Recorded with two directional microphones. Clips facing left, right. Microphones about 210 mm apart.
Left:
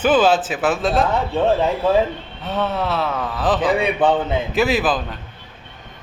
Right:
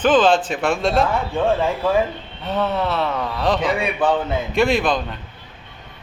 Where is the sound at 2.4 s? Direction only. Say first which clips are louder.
Right 1 dB; centre (ahead or behind).